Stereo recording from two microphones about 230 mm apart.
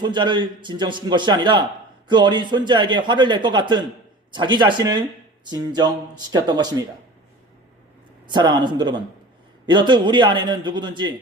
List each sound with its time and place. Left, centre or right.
0.0 s speech: centre
8.3 s speech: centre